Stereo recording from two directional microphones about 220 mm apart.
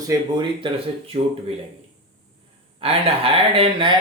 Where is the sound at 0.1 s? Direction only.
20° right (ahead or behind).